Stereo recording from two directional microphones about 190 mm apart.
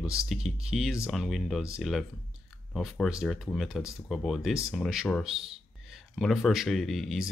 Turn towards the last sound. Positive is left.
turn(degrees=0)  # may be behind; listen again after turning